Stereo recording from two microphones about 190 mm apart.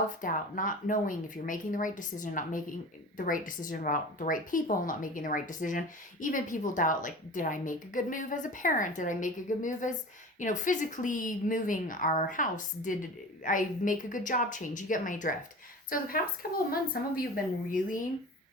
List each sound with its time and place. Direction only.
0.2 s a woman's voice: 45° left (ahead or behind)